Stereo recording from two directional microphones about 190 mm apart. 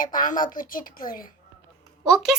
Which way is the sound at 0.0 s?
45° left (ahead or behind).